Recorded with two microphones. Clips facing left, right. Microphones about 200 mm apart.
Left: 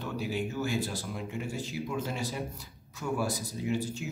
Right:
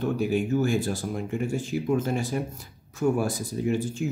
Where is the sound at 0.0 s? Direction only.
50° right (ahead or behind).